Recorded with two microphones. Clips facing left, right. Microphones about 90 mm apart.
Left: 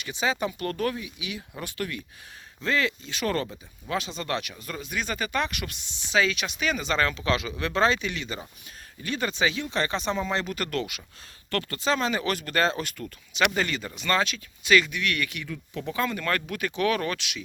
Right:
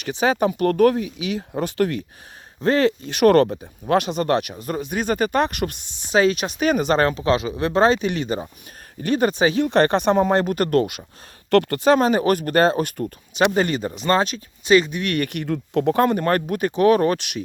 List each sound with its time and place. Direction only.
0.0 s speech: 50° right (ahead or behind)
3.0 s speech: 60° right (ahead or behind)
4.3 s speech: 50° right (ahead or behind)
9.6 s speech: 60° right (ahead or behind)